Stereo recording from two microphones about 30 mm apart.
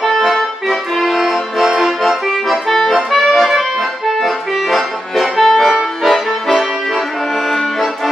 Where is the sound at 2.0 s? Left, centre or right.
Centre.